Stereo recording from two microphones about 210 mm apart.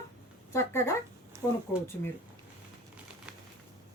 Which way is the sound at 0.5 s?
10° left (ahead or behind).